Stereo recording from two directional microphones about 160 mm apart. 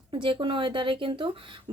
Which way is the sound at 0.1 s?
30° right (ahead or behind).